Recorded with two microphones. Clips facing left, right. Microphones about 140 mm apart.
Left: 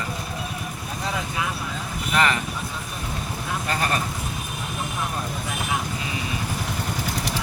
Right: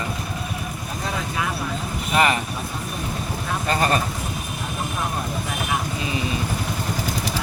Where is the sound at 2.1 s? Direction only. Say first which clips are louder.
Right 2 dB; 20° right (ahead or behind).